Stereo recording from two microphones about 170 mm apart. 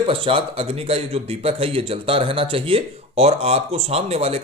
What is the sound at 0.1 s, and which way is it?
Speech, 30° right (ahead or behind).